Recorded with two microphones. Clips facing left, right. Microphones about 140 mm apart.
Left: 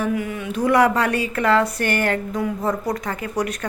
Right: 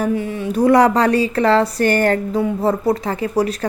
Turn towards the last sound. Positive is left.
turn(degrees=-30)  # may be behind; listen again after turning